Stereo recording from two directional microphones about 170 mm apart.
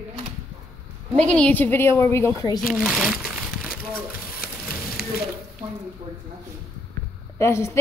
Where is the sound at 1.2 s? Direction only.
5° left (ahead or behind).